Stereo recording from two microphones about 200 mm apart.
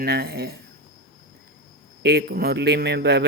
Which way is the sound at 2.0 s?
55° right (ahead or behind).